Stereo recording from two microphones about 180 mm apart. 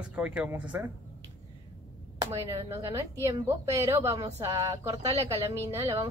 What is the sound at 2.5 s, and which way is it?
A woman's voice, 15° right (ahead or behind).